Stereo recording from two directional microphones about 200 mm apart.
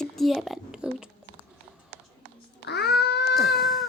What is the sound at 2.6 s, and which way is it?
Babbling, 55° left (ahead or behind).